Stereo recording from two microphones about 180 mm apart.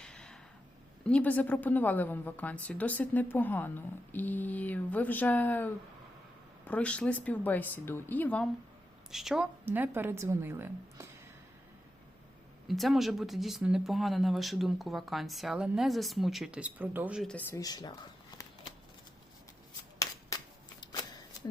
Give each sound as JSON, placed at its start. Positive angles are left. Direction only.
{"t": 0.0, "sound": "a sound", "side_deg": 5}
{"t": 1.0, "sound": "speech", "side_deg": 5}
{"t": 9.1, "sound": "a woman's voice", "side_deg": 0}
{"t": 12.6, "sound": "speech", "side_deg": 0}
{"t": 17.2, "sound": "speech", "side_deg": 10}